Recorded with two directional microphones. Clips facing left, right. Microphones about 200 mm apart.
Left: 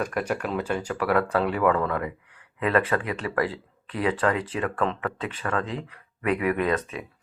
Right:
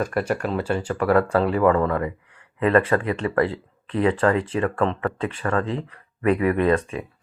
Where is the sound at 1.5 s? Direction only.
30° right (ahead or behind).